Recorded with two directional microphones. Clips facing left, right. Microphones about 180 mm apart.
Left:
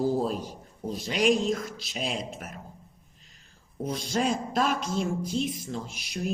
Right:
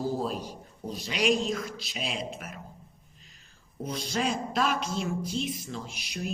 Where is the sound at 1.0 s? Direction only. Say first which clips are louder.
Left 3 dB; 50° left (ahead or behind).